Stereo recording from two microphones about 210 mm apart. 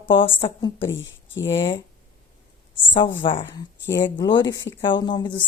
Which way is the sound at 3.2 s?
25° left (ahead or behind).